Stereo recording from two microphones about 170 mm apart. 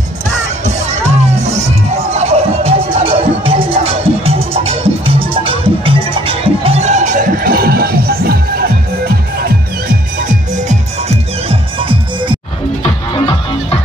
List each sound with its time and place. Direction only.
0.7 s music: 40° right (ahead or behind); by 9.1 s 65° right (ahead or behind)
10.2 s music: 45° right (ahead or behind)
11.4 s music: 30° right (ahead or behind)